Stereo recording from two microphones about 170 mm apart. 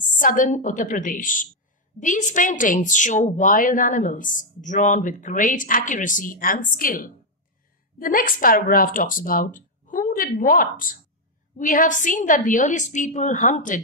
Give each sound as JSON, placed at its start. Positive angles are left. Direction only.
{"t": 0.2, "sound": "a woman's voice", "side_deg": 50}